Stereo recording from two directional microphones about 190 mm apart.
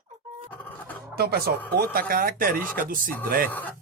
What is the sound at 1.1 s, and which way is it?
Speech, 55° right (ahead or behind).